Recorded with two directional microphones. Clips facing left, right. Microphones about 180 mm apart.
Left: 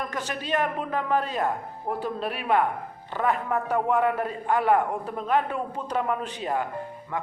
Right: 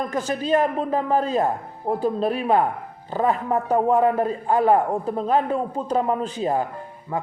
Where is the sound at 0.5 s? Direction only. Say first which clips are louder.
Right 6 dB; 30° right (ahead or behind).